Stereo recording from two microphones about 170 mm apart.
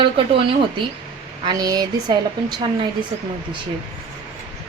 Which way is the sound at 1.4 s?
25° right (ahead or behind).